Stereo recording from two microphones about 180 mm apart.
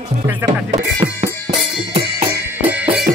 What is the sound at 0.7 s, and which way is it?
Music, 40° right (ahead or behind).